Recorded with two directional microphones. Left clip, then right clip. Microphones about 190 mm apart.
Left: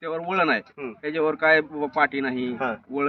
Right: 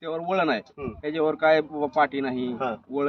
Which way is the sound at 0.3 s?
Centre (ahead or behind).